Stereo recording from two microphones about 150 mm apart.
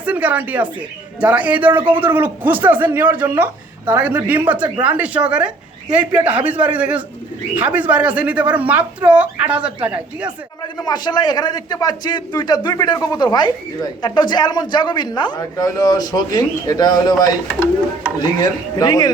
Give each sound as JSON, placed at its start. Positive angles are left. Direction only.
{"t": 0.0, "sound": "speech", "side_deg": -10}
{"t": 10.8, "sound": "a man's voice", "side_deg": 30}
{"t": 18.3, "sound": "a man's voice", "side_deg": 30}